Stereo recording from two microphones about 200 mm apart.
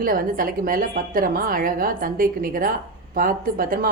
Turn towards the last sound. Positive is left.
turn(degrees=-45)  # may be behind; listen again after turning